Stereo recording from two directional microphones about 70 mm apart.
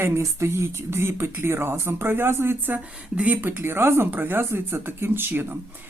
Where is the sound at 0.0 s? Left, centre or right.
Right.